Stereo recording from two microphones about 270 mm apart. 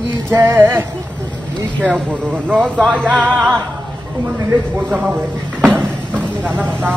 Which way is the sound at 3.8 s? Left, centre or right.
Centre.